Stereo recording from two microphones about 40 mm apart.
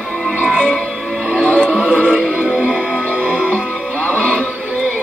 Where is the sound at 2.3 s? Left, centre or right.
Centre.